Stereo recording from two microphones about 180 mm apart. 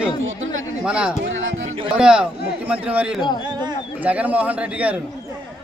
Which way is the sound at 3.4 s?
25° right (ahead or behind).